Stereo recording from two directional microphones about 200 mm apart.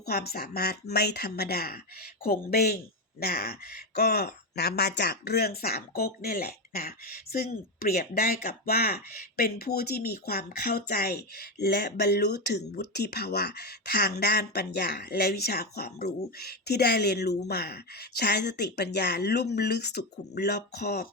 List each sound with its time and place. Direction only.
0.0 s speech: 50° left (ahead or behind)